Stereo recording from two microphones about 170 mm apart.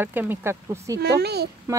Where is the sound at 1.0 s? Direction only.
75° right (ahead or behind).